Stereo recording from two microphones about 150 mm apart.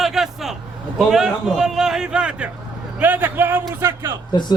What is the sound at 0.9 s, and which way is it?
A man's voice, 5° right (ahead or behind).